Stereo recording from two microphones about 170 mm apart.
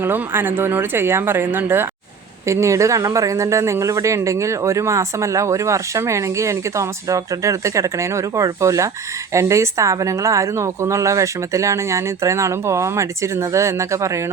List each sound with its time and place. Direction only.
0.0 s speech: 10° right (ahead or behind)